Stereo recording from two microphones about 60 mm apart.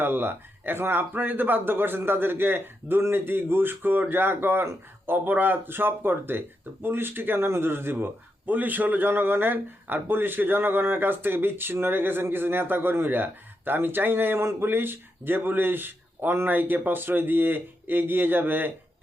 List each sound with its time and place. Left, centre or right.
0.0 s speech: right